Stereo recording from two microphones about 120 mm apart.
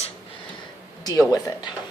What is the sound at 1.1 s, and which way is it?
Speech, 30° left (ahead or behind).